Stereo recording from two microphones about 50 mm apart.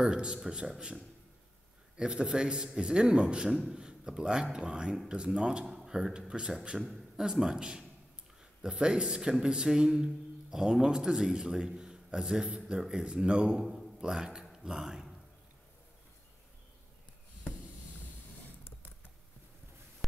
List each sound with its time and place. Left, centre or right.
0.1 s a man's voice: centre
2.0 s a man's voice: centre
13.6 s speech: centre
14.5 s a sound: centre